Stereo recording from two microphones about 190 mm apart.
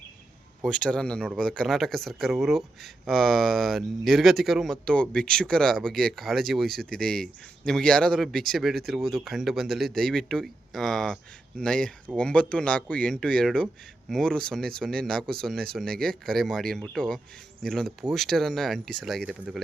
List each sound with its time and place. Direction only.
0.6 s speech: 5° left (ahead or behind)